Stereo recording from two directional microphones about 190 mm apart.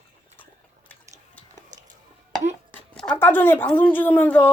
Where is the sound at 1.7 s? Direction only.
40° right (ahead or behind).